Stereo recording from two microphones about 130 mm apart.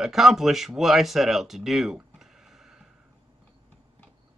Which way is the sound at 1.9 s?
5° right (ahead or behind).